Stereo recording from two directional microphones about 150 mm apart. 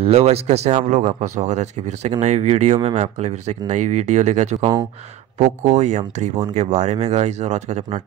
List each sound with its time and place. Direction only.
0.0 s speech: 40° right (ahead or behind)